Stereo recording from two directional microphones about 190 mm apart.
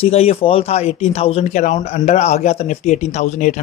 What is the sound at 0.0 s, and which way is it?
Speech, 30° left (ahead or behind).